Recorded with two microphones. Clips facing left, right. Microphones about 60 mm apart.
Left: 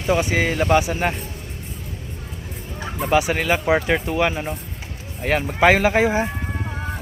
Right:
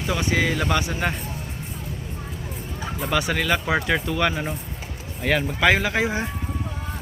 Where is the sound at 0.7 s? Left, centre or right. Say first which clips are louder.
Left 6 dB; left.